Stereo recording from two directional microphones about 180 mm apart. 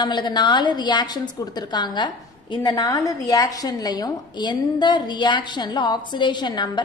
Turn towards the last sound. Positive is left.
turn(degrees=25)  # may be behind; listen again after turning